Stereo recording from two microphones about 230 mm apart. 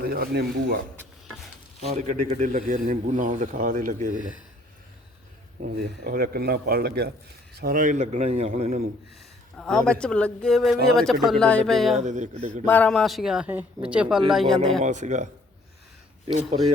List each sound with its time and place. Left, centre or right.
0.0 s speech: right
1.9 s speech: right
6.1 s speech: right
9.6 s a man's voice: centre
11.9 s speech: right
12.6 s a man's voice: centre
14.8 s speech: right